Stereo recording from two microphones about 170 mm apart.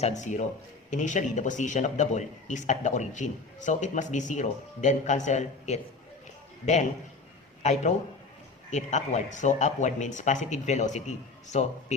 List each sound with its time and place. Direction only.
0.0 s a man's voice: 45° left (ahead or behind)
7.6 s a man's voice: 45° left (ahead or behind)